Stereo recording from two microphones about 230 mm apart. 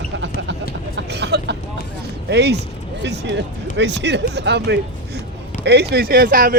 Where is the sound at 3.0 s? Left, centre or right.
Right.